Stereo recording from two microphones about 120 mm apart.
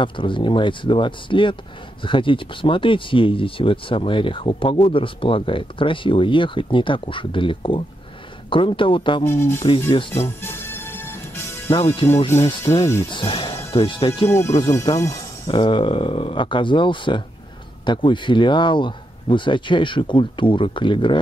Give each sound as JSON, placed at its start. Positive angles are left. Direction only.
{"t": 0.0, "sound": "speech", "side_deg": 45}
{"t": 9.3, "sound": "speech", "side_deg": 20}
{"t": 10.1, "sound": "music", "side_deg": 20}
{"t": 12.0, "sound": "speech", "side_deg": 50}
{"t": 12.6, "sound": "speech", "side_deg": 25}
{"t": 13.1, "sound": "speech", "side_deg": 45}
{"t": 14.3, "sound": "speech", "side_deg": 25}
{"t": 15.4, "sound": "speech", "side_deg": 45}